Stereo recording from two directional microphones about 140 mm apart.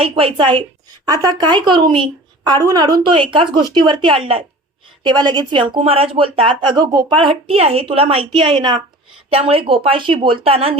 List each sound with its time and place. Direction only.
0.0 s a woman's voice: 40° right (ahead or behind)
9.3 s a woman's voice: 45° right (ahead or behind)